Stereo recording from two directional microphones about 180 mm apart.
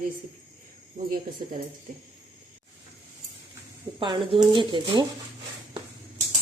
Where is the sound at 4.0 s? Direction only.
25° right (ahead or behind).